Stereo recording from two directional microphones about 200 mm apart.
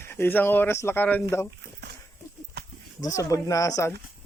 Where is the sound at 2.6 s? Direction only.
55° right (ahead or behind).